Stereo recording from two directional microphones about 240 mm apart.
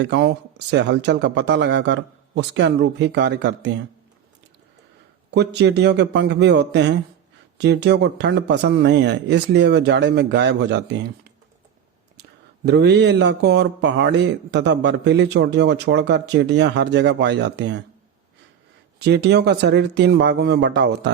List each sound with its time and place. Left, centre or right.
0.0 s a man's voice: right
5.3 s a man's voice: right
12.6 s a man's voice: right
18.9 s a man's voice: right